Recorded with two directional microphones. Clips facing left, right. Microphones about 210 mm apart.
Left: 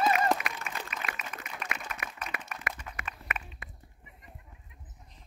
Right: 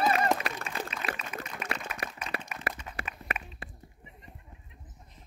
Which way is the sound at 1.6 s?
5° right (ahead or behind).